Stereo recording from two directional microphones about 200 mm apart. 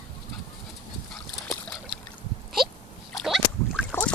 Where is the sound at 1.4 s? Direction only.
Centre (ahead or behind).